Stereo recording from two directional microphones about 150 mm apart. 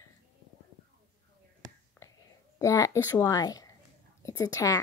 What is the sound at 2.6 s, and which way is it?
A woman's voice, 20° left (ahead or behind).